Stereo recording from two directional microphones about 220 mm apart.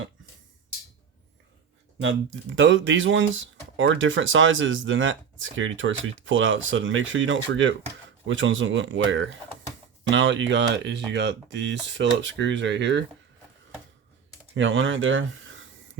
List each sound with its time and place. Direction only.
2.0 s speech: 60° right (ahead or behind)
14.5 s speech: 60° right (ahead or behind)